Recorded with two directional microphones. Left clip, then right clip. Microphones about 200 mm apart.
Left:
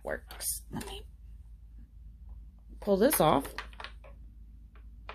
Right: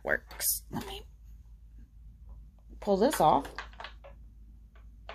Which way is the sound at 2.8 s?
5° left (ahead or behind).